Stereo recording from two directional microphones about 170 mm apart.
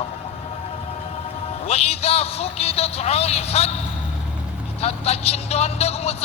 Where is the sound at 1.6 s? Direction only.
40° left (ahead or behind).